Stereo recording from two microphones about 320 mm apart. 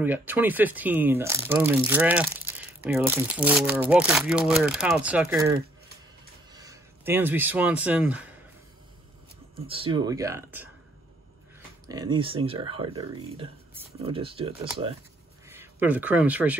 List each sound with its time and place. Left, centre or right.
0.0 s speech: centre
6.5 s speech: centre
9.7 s speech: centre
11.9 s speech: centre